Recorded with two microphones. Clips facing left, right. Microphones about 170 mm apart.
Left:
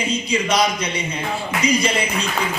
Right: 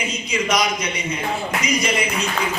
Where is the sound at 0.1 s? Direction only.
30° left (ahead or behind).